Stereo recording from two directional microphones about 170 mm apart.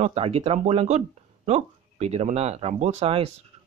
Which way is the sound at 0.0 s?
35° right (ahead or behind).